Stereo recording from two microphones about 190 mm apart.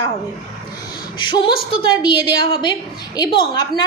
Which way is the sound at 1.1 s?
25° left (ahead or behind).